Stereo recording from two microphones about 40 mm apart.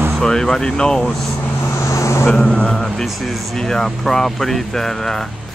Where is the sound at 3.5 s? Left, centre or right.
Centre.